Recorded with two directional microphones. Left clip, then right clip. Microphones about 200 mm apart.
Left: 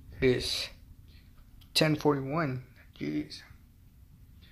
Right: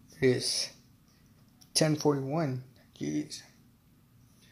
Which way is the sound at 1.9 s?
Centre (ahead or behind).